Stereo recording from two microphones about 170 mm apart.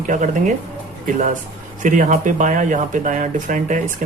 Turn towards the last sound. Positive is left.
turn(degrees=-50)  # may be behind; listen again after turning